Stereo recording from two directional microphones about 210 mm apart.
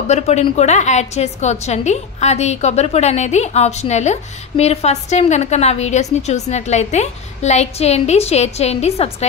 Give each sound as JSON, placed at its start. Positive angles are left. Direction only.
{"t": 0.1, "sound": "a woman's voice", "side_deg": 30}